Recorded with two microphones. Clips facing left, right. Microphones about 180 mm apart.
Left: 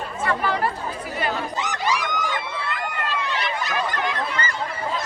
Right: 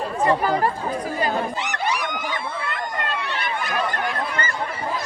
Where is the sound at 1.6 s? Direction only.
60° right (ahead or behind).